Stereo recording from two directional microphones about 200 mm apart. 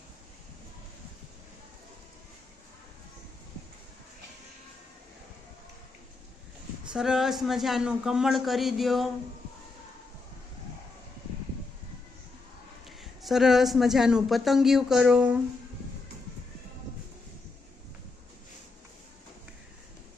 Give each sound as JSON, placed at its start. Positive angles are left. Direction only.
{"t": 6.9, "sound": "speech", "side_deg": -5}
{"t": 13.0, "sound": "speech", "side_deg": 0}